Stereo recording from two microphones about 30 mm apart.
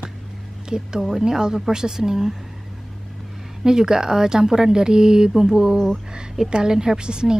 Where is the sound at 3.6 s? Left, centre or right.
Right.